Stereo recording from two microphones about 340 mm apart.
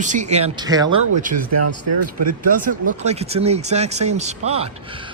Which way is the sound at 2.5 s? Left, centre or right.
Right.